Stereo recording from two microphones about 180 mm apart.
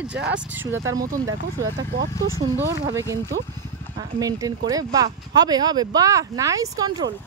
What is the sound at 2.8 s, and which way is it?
Speech, 20° right (ahead or behind).